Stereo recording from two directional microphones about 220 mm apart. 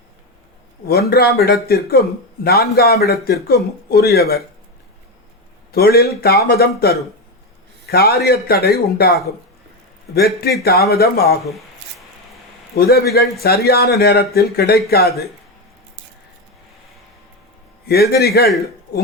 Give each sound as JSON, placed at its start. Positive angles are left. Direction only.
{"t": 0.9, "sound": "a man's voice", "side_deg": 45}
{"t": 5.7, "sound": "a man's voice", "side_deg": 45}
{"t": 11.4, "sound": "rub", "side_deg": 0}
{"t": 12.7, "sound": "a man's voice", "side_deg": 45}
{"t": 17.8, "sound": "a man's voice", "side_deg": 45}